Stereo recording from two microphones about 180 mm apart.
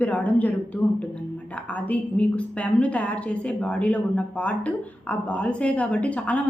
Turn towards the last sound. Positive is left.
turn(degrees=10)  # may be behind; listen again after turning